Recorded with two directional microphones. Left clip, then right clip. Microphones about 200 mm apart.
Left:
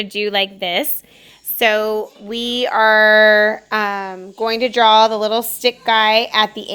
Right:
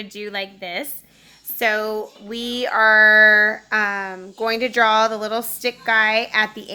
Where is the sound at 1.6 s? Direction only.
30° left (ahead or behind).